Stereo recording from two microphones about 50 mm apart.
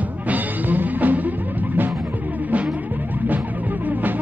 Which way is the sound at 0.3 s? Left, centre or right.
Right.